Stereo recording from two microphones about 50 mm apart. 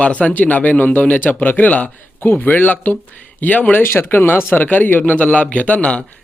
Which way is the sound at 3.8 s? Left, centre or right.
Left.